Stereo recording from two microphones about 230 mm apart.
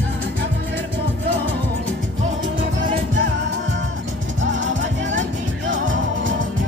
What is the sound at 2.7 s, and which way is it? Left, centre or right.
Music, right.